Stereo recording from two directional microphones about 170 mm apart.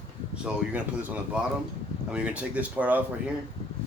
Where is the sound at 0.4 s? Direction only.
10° right (ahead or behind).